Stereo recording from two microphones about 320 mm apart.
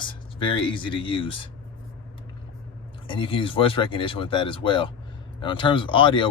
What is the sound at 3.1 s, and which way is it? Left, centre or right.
A man's voice, centre.